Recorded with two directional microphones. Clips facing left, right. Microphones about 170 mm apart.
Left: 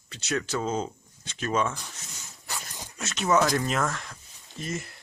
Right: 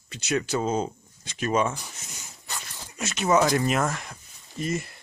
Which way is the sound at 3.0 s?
10° right (ahead or behind).